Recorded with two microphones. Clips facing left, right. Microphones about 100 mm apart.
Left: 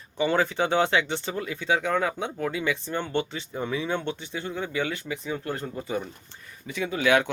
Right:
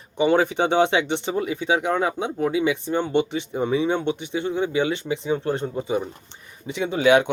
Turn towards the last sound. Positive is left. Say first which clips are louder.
# right 5 dB
turn(degrees=-25)  # may be behind; listen again after turning